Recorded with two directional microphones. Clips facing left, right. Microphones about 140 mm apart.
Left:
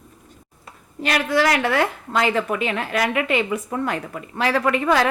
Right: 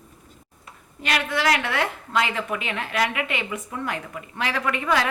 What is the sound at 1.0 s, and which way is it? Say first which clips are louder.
A woman's voice: left 4 dB; 35° left (ahead or behind).